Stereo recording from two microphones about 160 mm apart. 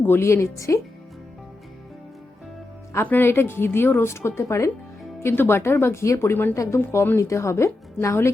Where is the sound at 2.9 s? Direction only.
15° left (ahead or behind).